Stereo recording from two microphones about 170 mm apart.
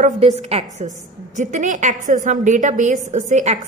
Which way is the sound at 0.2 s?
35° right (ahead or behind).